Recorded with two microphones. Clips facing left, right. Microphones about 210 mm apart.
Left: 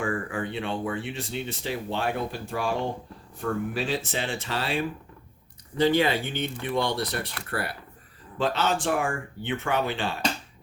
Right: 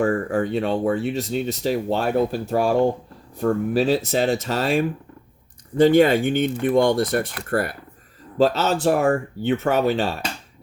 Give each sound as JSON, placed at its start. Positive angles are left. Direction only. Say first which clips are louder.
{"t": 0.0, "sound": "speech", "louder": "right 9 dB", "side_deg": -40}